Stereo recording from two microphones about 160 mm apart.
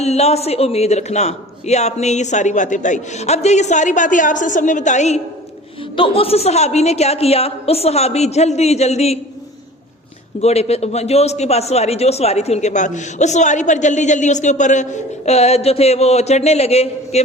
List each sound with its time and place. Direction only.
0.0 s a man's voice: 40° left (ahead or behind)
10.4 s a man's voice: 40° left (ahead or behind)